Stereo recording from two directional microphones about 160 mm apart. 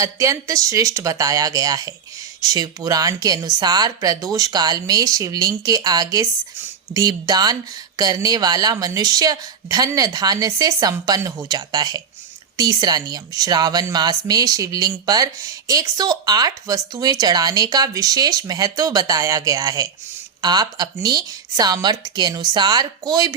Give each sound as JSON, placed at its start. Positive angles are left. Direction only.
{"t": 0.0, "sound": "speech", "side_deg": -20}